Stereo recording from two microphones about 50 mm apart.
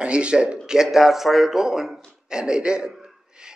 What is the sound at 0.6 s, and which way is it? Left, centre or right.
A man's voice, centre.